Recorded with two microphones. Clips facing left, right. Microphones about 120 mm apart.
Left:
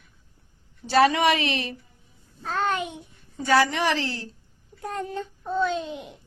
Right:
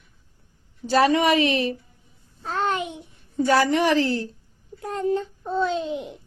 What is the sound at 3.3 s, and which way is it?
Speech, 40° right (ahead or behind).